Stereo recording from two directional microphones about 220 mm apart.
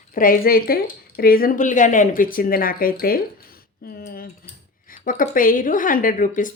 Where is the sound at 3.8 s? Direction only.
45° left (ahead or behind).